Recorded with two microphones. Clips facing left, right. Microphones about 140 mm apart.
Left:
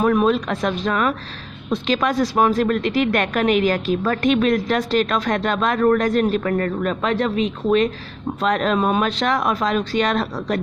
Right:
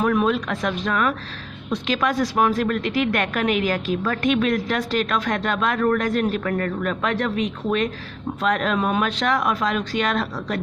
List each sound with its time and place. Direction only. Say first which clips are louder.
0.0 s a woman's voice: left 3 dB; 25° left (ahead or behind)